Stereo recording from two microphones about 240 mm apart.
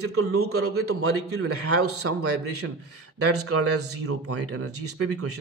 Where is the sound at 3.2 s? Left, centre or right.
Right.